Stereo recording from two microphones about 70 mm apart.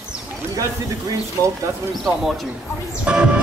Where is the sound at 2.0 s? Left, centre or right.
Centre.